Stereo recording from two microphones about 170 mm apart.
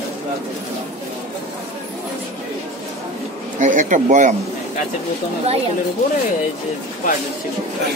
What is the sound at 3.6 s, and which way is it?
Speech, 50° right (ahead or behind).